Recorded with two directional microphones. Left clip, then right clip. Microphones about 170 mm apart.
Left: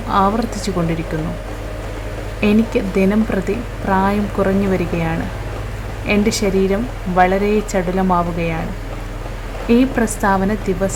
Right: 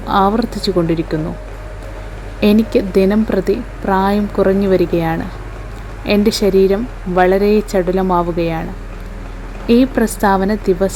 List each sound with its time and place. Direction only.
0.1 s speech: 40° right (ahead or behind)
2.4 s speech: 45° right (ahead or behind)
9.6 s speech: 45° right (ahead or behind)